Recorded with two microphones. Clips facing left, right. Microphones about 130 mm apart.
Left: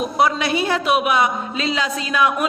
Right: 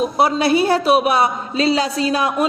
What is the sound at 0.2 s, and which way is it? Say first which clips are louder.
A man's voice: right 3 dB; 35° right (ahead or behind).